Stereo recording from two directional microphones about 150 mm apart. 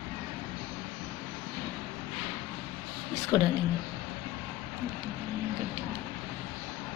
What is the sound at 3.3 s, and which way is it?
Speech, 5° left (ahead or behind).